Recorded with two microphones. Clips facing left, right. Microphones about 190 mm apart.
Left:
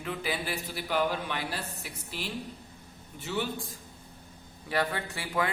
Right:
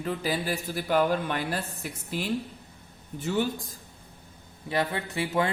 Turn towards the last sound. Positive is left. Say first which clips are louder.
# right 4 dB
turn(degrees=-25)  # may be behind; listen again after turning